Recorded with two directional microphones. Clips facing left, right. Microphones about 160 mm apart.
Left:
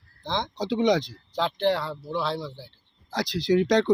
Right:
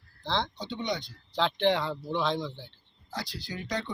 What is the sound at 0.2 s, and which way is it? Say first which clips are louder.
Speech: left 1 dB; 15° left (ahead or behind).